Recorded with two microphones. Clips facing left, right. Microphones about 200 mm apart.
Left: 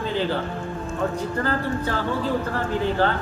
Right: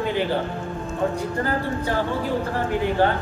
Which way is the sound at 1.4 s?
15° right (ahead or behind).